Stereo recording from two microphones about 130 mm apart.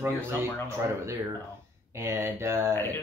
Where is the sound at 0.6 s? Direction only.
20° right (ahead or behind).